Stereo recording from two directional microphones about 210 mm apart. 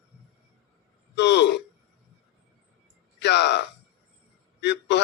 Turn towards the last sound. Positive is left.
turn(degrees=55)  # may be behind; listen again after turning